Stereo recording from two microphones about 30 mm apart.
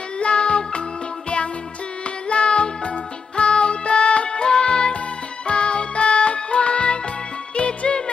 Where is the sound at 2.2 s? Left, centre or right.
Left.